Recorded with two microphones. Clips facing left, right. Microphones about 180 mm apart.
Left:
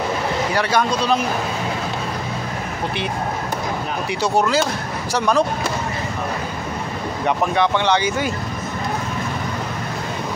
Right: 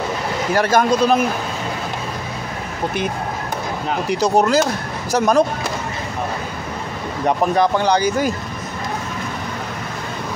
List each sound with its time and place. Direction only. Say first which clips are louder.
0.6 s speech: right 6 dB; 45° right (ahead or behind)
4.1 s speech: right 3 dB; 40° right (ahead or behind)
7.2 s speech: right 3 dB; 40° right (ahead or behind)